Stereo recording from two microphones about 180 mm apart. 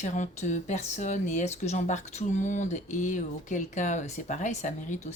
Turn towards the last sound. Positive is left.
turn(degrees=40)  # may be behind; listen again after turning